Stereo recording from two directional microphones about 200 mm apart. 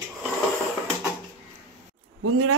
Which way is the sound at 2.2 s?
90° right.